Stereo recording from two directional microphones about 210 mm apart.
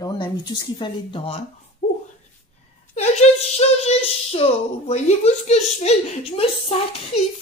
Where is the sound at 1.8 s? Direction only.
35° left (ahead or behind).